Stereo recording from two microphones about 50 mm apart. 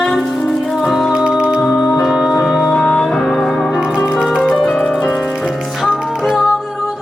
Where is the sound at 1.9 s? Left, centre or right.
Centre.